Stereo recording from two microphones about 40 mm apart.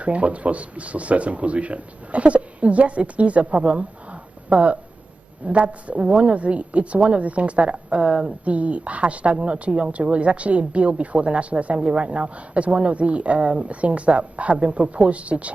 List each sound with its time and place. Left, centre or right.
0.0 s speech: right
8.5 s speech: right